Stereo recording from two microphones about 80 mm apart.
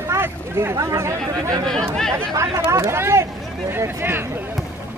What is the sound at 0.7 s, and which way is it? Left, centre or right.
Speech, right.